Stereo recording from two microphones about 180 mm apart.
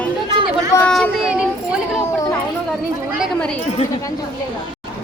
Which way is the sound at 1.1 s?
5° right (ahead or behind).